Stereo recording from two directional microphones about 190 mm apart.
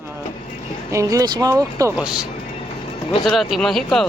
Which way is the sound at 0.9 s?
15° right (ahead or behind).